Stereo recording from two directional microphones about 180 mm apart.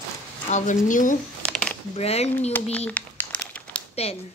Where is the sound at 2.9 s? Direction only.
10° left (ahead or behind).